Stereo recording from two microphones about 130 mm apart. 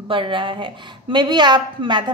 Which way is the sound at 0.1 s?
40° right (ahead or behind).